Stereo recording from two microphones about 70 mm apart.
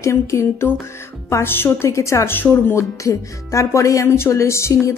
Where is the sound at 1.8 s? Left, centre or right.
Left.